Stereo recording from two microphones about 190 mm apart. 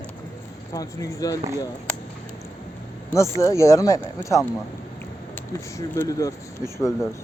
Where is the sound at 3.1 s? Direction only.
15° left (ahead or behind).